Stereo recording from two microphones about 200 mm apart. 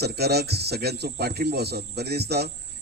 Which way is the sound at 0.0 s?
55° right (ahead or behind).